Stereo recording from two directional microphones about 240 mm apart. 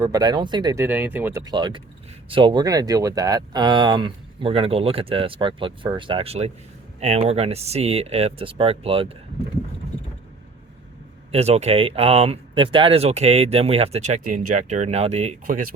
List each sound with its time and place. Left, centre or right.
0.0 s speech: centre
11.3 s speech: right